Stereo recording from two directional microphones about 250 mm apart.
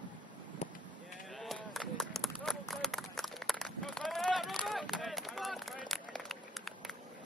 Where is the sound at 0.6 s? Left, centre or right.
Left.